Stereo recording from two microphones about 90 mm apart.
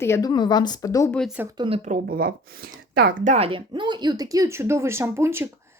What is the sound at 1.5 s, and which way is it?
Speech, 70° right (ahead or behind).